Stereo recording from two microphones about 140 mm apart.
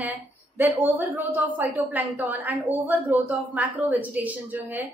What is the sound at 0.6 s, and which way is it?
A woman's voice, 15° right (ahead or behind).